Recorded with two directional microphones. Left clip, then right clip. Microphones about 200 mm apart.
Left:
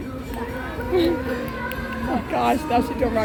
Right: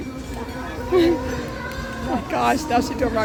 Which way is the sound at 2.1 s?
Centre (ahead or behind).